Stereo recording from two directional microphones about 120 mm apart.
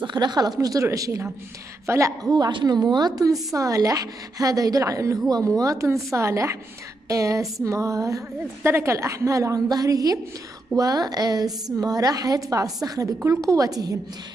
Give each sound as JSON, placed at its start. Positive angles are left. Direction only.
{"t": 0.0, "sound": "a woman's voice", "side_deg": -35}